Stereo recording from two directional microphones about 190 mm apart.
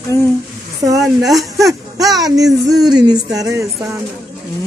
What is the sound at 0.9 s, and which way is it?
Speech, centre (ahead or behind).